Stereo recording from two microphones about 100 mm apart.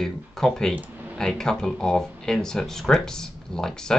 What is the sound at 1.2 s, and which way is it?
Speech, 5° left (ahead or behind).